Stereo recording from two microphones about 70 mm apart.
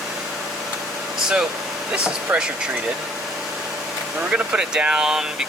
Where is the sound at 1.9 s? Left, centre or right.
Centre.